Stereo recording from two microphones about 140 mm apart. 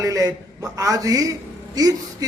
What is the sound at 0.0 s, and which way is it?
A man's voice, 25° right (ahead or behind).